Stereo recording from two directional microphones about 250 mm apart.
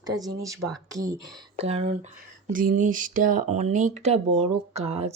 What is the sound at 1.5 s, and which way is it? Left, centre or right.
Speech, right.